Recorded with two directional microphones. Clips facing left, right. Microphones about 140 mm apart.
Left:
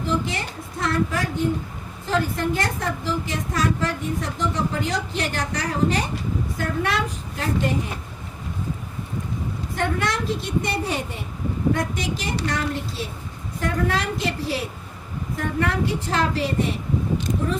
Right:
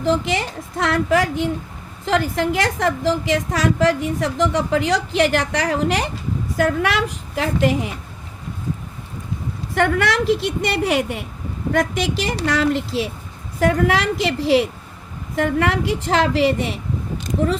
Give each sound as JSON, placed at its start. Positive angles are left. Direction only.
{"t": 0.0, "sound": "a woman's voice", "side_deg": -90}
{"t": 9.7, "sound": "a woman's voice", "side_deg": -90}
{"t": 11.7, "sound": "a woman's voice", "side_deg": -90}